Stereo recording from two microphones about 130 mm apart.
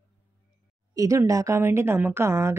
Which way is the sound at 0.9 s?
25° right (ahead or behind).